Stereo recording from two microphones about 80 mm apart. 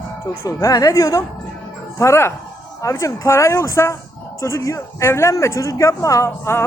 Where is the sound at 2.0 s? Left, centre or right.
Left.